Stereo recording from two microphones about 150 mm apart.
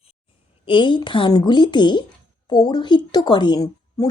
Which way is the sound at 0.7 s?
30° left (ahead or behind).